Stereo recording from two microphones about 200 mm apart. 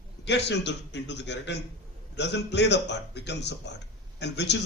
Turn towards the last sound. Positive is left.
turn(degrees=60)  # may be behind; listen again after turning